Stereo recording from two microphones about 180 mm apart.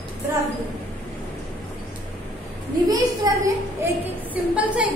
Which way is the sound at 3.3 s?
20° right (ahead or behind).